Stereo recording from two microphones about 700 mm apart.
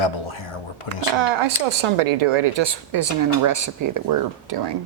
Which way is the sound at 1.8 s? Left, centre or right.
Right.